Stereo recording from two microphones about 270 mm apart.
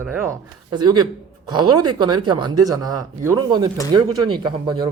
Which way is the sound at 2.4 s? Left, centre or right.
Right.